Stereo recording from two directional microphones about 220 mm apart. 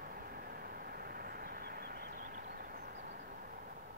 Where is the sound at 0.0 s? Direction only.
40° right (ahead or behind).